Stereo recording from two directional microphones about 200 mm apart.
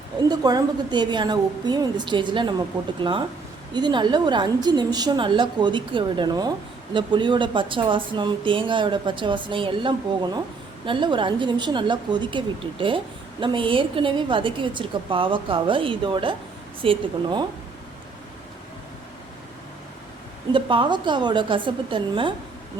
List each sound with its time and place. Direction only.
0.3 s speech: 20° right (ahead or behind)
13.4 s speech: 25° right (ahead or behind)
20.5 s speech: 25° right (ahead or behind)